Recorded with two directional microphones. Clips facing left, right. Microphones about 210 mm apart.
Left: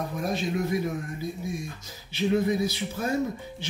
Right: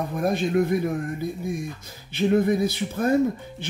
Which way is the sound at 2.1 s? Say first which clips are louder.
Right 4 dB; 55° right (ahead or behind).